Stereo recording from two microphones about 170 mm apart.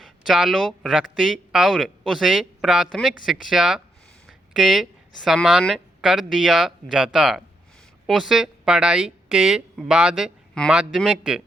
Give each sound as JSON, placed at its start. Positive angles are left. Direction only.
{"t": 0.0, "sound": "a woman's voice", "side_deg": -5}